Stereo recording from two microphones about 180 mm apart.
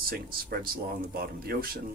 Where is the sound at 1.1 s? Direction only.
60° right (ahead or behind).